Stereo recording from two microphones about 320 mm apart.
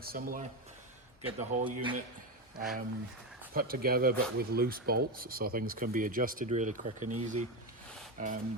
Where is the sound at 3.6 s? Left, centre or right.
Right.